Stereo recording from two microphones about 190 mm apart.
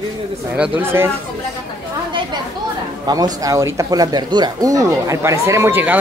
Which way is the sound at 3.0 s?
20° right (ahead or behind).